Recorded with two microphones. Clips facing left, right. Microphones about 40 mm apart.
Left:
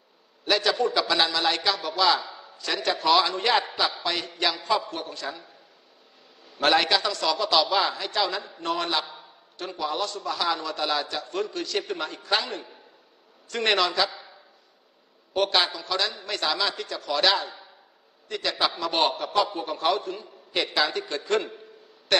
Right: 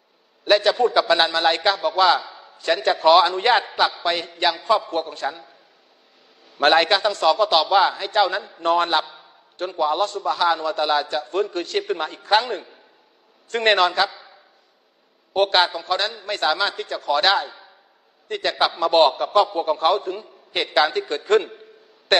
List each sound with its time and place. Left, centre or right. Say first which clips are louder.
0.7 s a man's voice: right 6 dB; right; by 4.8 s centre
4.8 s a man's voice: right 8 dB; right
6.6 s a man's voice: right 5 dB; right
11.2 s a man's voice: right 6 dB; right
15.3 s a man's voice: right 5 dB; right